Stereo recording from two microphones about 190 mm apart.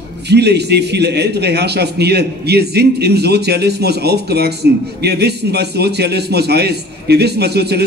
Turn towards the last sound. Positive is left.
turn(degrees=-60)  # may be behind; listen again after turning